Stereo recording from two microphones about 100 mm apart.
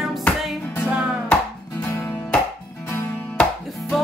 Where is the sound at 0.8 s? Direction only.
15° right (ahead or behind).